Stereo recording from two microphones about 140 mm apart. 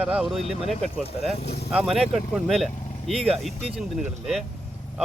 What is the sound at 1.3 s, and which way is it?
Speech, 50° left (ahead or behind).